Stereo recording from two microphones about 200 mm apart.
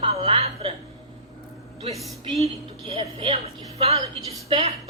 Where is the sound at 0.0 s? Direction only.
30° right (ahead or behind).